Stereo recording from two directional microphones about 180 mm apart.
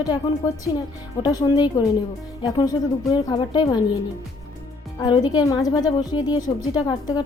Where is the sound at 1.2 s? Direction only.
20° left (ahead or behind).